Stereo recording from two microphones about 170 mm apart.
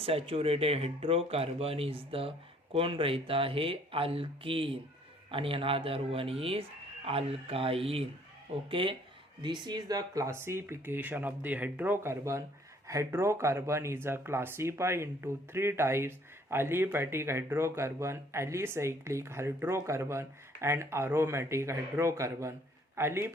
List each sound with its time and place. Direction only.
0.0 s speech: 35° right (ahead or behind); by 23.3 s 15° right (ahead or behind)